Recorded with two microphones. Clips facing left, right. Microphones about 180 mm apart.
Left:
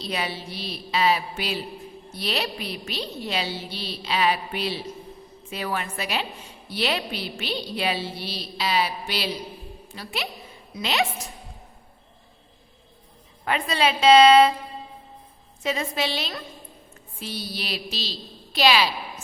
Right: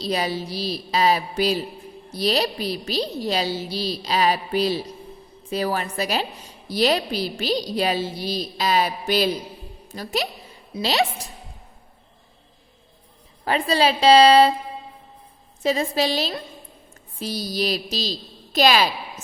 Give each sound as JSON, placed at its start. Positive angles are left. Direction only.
{"t": 0.0, "sound": "a woman's voice", "side_deg": -40}
{"t": 13.4, "sound": "a woman's voice", "side_deg": -35}
{"t": 15.6, "sound": "a woman's voice", "side_deg": -35}